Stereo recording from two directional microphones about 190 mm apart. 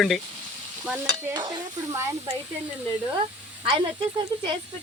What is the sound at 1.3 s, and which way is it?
Stir, 20° right (ahead or behind).